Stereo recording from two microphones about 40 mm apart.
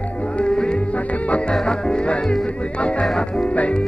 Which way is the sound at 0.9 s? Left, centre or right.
Left.